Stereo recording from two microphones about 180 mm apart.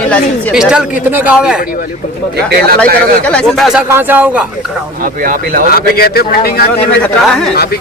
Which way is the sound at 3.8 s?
10° right (ahead or behind).